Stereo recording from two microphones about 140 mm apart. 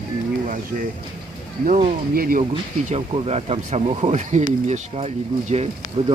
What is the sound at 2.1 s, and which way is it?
Speech, 90° right.